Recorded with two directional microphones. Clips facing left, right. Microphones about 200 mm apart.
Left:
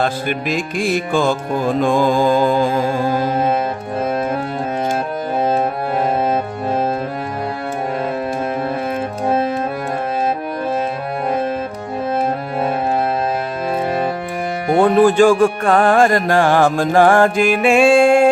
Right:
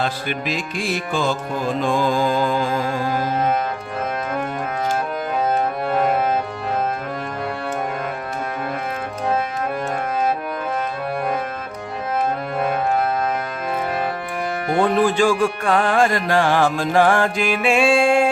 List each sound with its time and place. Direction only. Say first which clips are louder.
0.0 s music: left 4 dB; 50° left (ahead or behind)
14.8 s music: left 6 dB; 50° left (ahead or behind)